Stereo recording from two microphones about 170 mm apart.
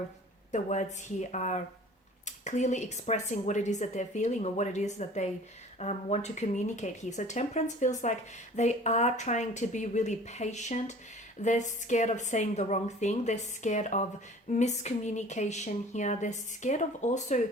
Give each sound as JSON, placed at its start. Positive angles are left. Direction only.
{"t": 0.5, "sound": "speech", "side_deg": 45}